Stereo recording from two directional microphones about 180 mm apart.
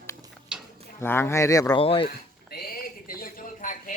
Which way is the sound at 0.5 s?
5° right (ahead or behind).